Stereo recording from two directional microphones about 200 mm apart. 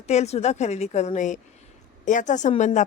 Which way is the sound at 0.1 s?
35° left (ahead or behind).